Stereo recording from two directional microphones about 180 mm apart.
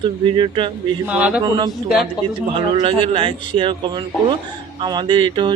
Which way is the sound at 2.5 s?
30° right (ahead or behind).